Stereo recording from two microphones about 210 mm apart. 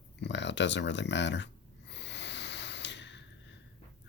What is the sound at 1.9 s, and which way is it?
Snort, 55° left (ahead or behind).